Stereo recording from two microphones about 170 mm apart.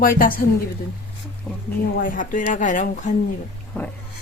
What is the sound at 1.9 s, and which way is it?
Speech, 55° left (ahead or behind).